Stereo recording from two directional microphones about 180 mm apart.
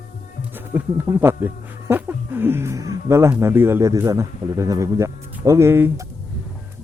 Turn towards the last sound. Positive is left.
turn(degrees=-15)  # may be behind; listen again after turning